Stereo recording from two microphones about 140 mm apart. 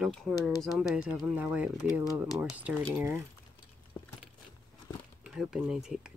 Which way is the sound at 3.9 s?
15° left (ahead or behind).